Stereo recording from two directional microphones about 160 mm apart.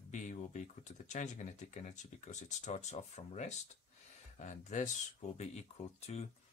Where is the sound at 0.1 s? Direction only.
50° left (ahead or behind).